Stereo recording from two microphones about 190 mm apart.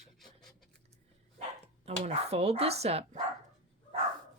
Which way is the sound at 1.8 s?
35° right (ahead or behind).